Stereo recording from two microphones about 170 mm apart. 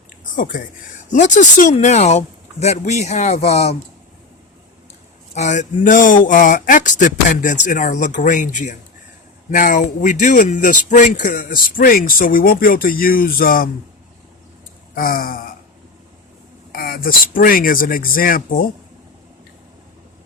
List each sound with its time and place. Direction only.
0.3 s speech: 50° left (ahead or behind)
5.3 s speech: 45° left (ahead or behind)
14.9 s speech: 55° left (ahead or behind)
16.7 s speech: 60° left (ahead or behind)